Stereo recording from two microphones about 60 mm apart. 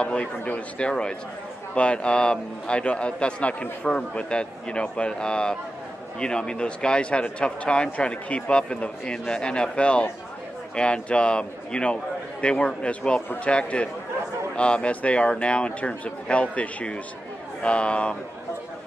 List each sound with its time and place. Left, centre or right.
0.0 s a man's voice: centre